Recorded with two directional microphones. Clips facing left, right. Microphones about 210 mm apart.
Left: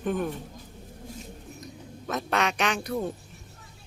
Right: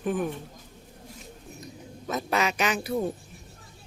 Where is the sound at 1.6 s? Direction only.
Centre (ahead or behind).